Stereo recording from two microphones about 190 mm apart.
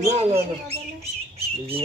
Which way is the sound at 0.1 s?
35° right (ahead or behind).